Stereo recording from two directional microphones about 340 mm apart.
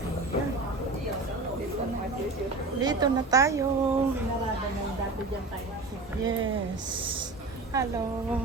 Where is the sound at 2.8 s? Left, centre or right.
Centre.